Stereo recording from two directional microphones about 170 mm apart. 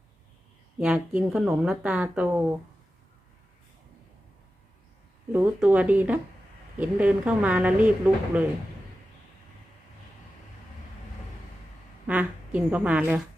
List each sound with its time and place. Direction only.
0.8 s speech: 5° right (ahead or behind)
5.3 s speech: 10° right (ahead or behind)
12.0 s speech: 10° right (ahead or behind)